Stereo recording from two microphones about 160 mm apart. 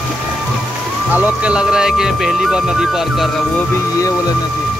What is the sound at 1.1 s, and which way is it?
Speech, 10° right (ahead or behind).